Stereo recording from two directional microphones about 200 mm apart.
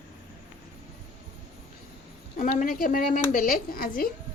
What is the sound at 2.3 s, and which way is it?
A woman's voice, 40° left (ahead or behind).